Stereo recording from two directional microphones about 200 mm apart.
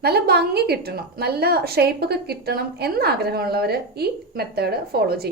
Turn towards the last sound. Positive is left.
turn(degrees=-50)  # may be behind; listen again after turning